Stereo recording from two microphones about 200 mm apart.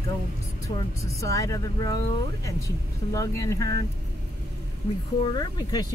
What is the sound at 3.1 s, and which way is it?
Speech, 15° left (ahead or behind).